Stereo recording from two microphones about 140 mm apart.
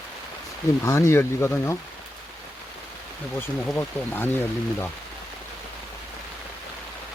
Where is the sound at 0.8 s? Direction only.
20° left (ahead or behind).